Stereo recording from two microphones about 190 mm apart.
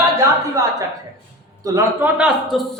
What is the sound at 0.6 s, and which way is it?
A man's voice, 15° right (ahead or behind).